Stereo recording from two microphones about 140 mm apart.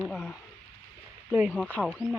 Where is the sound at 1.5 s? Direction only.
10° left (ahead or behind).